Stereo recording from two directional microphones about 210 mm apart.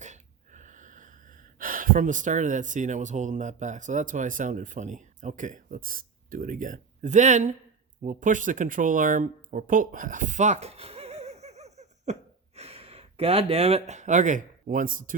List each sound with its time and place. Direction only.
0.0 s speech: 35° right (ahead or behind)